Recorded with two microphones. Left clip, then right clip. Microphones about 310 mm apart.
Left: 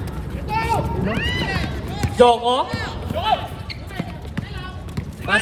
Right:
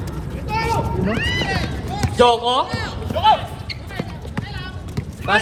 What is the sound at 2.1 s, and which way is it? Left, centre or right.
Speech, right.